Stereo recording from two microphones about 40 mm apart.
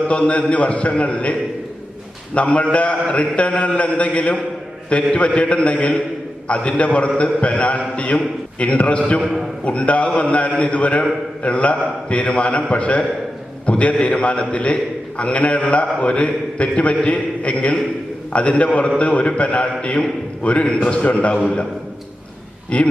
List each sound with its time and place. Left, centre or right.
0.1 s a man's voice: left
22.7 s a man's voice: left